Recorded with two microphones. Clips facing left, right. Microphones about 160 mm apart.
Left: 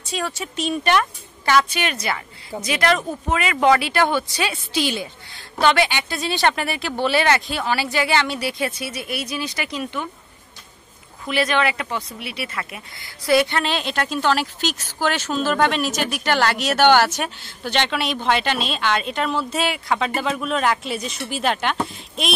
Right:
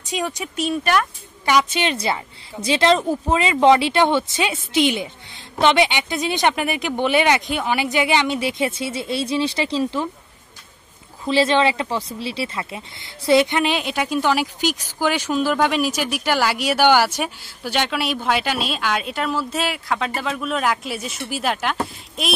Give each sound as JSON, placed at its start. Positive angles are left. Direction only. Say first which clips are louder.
{"t": 0.0, "sound": "speech", "louder": "right 2 dB", "side_deg": -20}
{"t": 1.5, "sound": "speech", "louder": "right 1 dB", "side_deg": -20}
{"t": 11.2, "sound": "speech", "louder": "right 4 dB", "side_deg": -30}